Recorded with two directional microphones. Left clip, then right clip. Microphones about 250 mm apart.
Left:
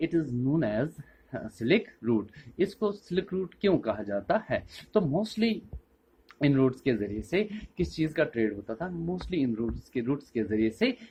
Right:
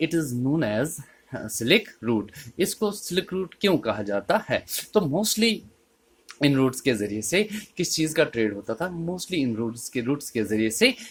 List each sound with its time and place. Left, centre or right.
0.0 s speech: right